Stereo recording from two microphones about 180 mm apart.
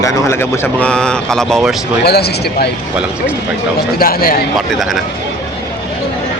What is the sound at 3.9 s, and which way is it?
Speech, 55° left (ahead or behind).